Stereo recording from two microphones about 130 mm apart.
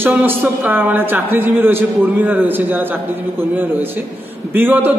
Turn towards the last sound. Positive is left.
turn(degrees=-15)  # may be behind; listen again after turning